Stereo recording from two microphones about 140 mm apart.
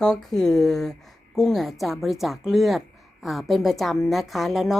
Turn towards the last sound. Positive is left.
turn(degrees=0)  # may be behind; listen again after turning